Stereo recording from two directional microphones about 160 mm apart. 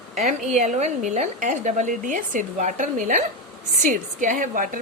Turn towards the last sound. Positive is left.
turn(degrees=-55)  # may be behind; listen again after turning